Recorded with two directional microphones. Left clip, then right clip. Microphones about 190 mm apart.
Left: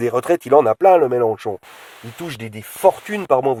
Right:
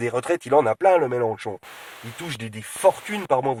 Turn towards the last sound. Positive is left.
turn(degrees=45)  # may be behind; listen again after turning